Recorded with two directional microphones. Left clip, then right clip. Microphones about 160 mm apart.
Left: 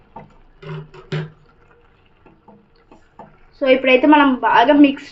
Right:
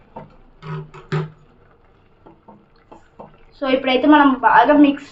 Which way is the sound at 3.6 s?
35° left (ahead or behind).